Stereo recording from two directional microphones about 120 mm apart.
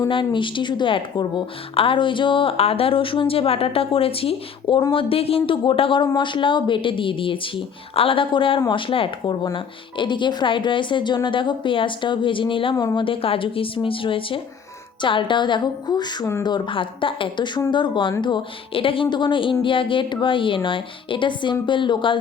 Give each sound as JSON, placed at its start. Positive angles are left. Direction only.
{"t": 0.1, "sound": "speech", "side_deg": 45}
{"t": 12.7, "sound": "speech", "side_deg": 35}
{"t": 15.0, "sound": "music", "side_deg": 40}
{"t": 16.4, "sound": "speech", "side_deg": 40}
{"t": 17.7, "sound": "music", "side_deg": 40}
{"t": 18.2, "sound": "speech", "side_deg": 40}